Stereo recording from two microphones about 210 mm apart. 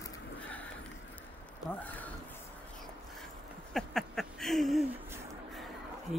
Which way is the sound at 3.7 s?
Centre (ahead or behind).